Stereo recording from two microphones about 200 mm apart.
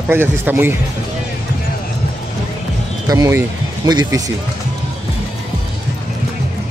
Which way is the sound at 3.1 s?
15° right (ahead or behind).